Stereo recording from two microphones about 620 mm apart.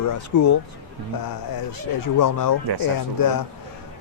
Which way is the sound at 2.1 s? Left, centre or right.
Left.